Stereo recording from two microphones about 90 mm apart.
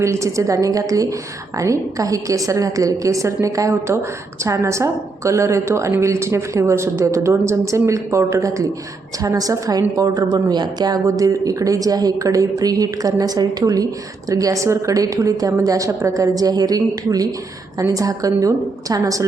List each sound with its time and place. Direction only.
0.0 s a woman's voice: 35° right (ahead or behind)
11.0 s a woman's voice: 40° right (ahead or behind)